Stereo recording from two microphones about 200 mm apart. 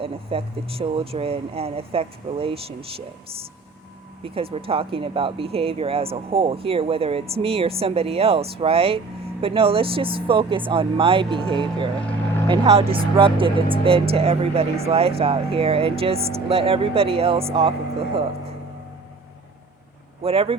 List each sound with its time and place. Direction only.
0.0 s speech: 30° right (ahead or behind)
4.2 s speech: 30° right (ahead or behind)
20.2 s speech: 30° right (ahead or behind)